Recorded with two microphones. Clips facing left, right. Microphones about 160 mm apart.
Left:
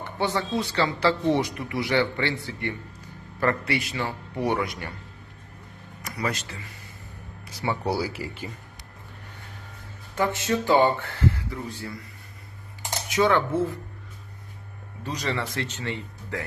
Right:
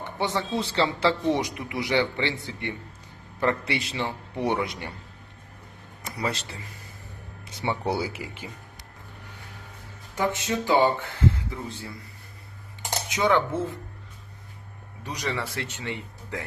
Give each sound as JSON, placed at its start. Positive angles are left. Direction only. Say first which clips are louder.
{"t": 0.0, "sound": "a man's voice", "louder": "left 1 dB", "side_deg": -20}
{"t": 6.0, "sound": "speech", "louder": "even", "side_deg": -25}
{"t": 7.9, "sound": "a man's voice", "louder": "left 1 dB", "side_deg": -20}
{"t": 10.2, "sound": "speech", "louder": "left 2 dB", "side_deg": -15}
{"t": 13.1, "sound": "a man's voice", "louder": "left 2 dB", "side_deg": -20}
{"t": 15.0, "sound": "speech", "louder": "left 2 dB", "side_deg": -10}